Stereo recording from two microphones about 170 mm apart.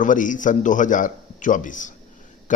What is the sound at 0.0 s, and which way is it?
Speech, 50° left (ahead or behind).